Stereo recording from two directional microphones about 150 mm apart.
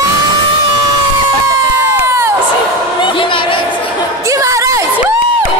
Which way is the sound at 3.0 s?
35° left (ahead or behind).